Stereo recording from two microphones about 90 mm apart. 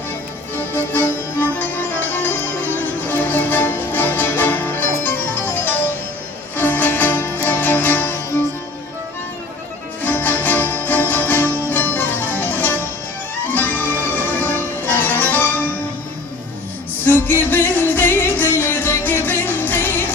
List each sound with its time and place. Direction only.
0.5 s music: 25° left (ahead or behind)
10.0 s music: 20° left (ahead or behind)
17.1 s music: 25° left (ahead or behind)